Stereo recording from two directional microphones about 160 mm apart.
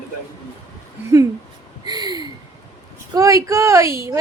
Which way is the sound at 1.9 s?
25° right (ahead or behind).